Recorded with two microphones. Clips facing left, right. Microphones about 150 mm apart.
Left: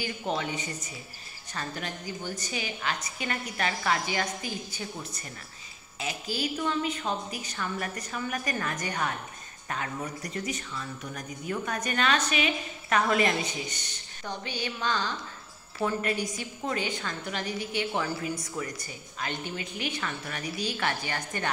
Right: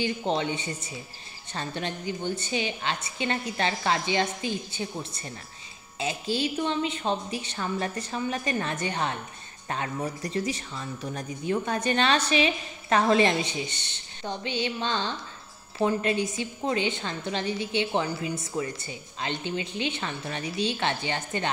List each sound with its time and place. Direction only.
0.0 s a woman's voice: 25° right (ahead or behind)